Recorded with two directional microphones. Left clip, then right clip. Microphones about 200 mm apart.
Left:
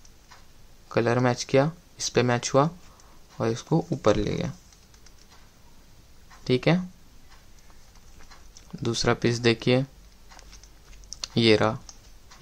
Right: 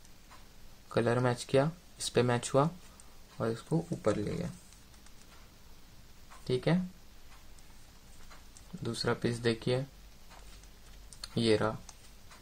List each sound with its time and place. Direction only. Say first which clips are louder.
0.8 s speech: left 6 dB; 10° left (ahead or behind)
3.3 s speech: left 7 dB; 20° left (ahead or behind)
4.0 s speech: left 10 dB; 35° left (ahead or behind)
6.4 s speech: left 8 dB; 25° left (ahead or behind)
8.8 s speech: left 9 dB; 25° left (ahead or behind)
11.3 s speech: left 9 dB; 25° left (ahead or behind)